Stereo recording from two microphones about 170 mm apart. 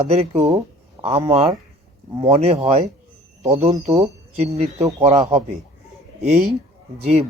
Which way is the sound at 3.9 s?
20° right (ahead or behind).